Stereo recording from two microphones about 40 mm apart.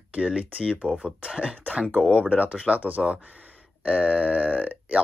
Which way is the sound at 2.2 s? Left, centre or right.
Right.